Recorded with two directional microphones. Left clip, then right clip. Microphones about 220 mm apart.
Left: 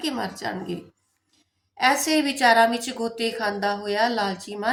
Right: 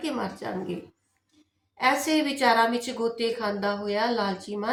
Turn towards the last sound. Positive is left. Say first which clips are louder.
# left 3 dB
turn(degrees=45)  # may be behind; listen again after turning